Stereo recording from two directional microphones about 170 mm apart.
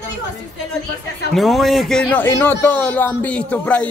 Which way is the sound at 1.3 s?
Centre (ahead or behind).